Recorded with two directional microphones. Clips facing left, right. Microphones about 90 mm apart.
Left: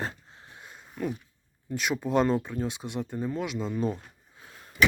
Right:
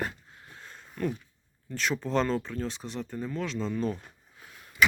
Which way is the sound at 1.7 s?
10° left (ahead or behind).